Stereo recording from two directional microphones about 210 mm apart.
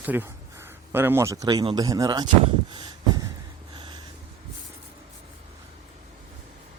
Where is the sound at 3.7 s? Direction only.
20° right (ahead or behind).